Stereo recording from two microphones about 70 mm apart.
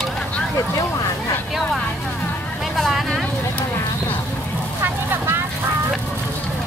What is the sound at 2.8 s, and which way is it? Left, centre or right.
Vehicle, centre.